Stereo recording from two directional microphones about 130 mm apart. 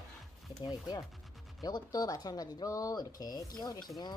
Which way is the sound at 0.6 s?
30° left (ahead or behind).